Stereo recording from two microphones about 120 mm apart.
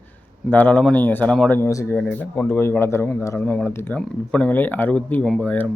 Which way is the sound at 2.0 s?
10° left (ahead or behind).